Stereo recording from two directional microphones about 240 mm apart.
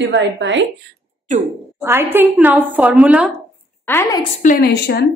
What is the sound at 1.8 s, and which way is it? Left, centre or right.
A woman's voice, centre.